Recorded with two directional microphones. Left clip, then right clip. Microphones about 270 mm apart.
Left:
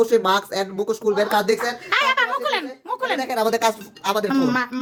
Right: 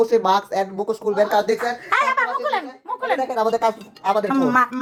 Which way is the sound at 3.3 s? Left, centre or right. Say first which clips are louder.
Left 2 dB; left.